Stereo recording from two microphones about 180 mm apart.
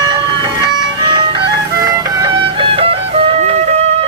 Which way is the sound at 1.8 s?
20° right (ahead or behind).